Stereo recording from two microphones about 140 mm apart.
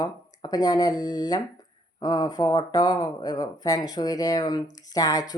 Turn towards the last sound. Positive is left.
turn(degrees=25)  # may be behind; listen again after turning